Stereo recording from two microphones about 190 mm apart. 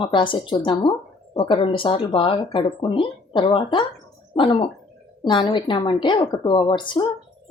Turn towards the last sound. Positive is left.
turn(degrees=25)  # may be behind; listen again after turning